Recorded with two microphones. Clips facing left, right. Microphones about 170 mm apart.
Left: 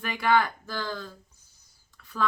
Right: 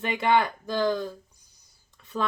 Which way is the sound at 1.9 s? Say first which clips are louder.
Right 7 dB; 20° right (ahead or behind).